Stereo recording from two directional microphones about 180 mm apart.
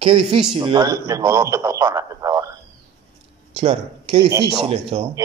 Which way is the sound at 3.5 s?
30° right (ahead or behind).